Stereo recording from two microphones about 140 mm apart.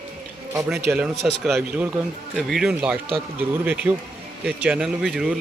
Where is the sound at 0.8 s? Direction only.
10° right (ahead or behind).